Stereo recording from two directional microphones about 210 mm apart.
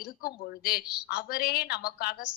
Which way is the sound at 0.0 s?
50° left (ahead or behind).